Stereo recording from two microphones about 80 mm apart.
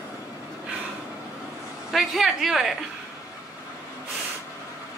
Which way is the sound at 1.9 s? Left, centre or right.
Centre.